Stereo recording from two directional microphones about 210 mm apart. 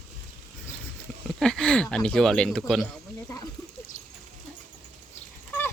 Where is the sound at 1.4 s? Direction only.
5° left (ahead or behind).